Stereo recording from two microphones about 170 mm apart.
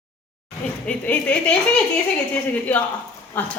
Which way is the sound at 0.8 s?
5° left (ahead or behind).